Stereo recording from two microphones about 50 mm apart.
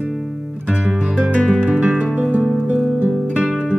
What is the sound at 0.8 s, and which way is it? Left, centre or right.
Music, right.